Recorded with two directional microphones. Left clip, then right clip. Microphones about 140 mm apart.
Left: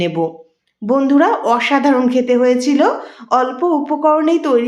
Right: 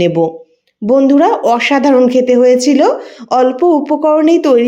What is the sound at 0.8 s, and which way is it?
Speech, 25° right (ahead or behind).